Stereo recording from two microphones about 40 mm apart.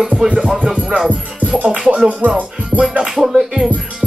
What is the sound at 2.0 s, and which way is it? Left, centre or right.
Music, right.